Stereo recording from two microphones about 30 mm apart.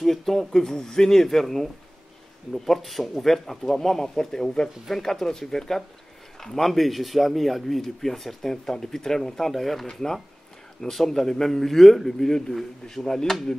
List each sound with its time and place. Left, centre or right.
0.0 s speech: centre
1.2 s speech: centre
9.8 s speech: centre
12.3 s speech: left